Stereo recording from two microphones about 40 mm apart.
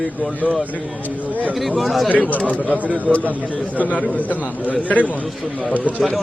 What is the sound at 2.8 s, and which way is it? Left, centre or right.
Speech, right.